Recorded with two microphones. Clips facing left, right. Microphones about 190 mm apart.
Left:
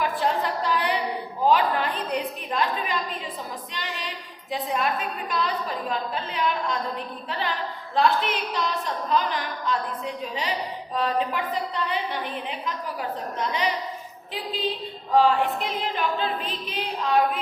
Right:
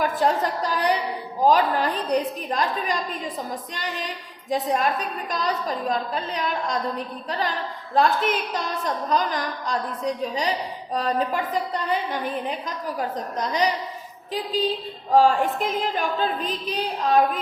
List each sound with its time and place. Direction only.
0.0 s a sound: 40° right (ahead or behind)
1.5 s a woman's voice: 40° right (ahead or behind)
4.4 s a woman's voice: 45° right (ahead or behind)
10.9 s a woman's voice: 45° right (ahead or behind)
15.1 s a woman's voice: 45° right (ahead or behind)